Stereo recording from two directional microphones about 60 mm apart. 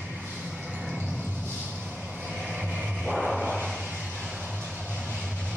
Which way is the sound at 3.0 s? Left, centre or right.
Centre.